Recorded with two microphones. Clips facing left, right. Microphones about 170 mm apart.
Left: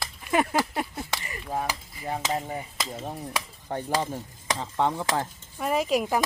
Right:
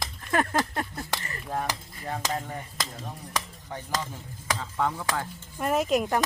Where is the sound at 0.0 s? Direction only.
10° left (ahead or behind).